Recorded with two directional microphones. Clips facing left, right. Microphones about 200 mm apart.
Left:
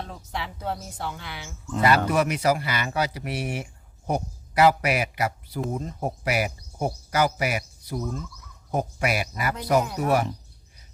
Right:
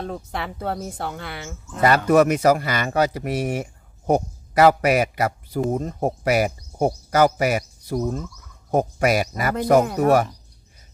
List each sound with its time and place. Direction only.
0.0 s speech: 55° right (ahead or behind)